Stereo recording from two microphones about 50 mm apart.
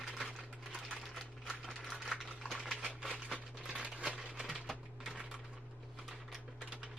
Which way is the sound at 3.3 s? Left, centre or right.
Right.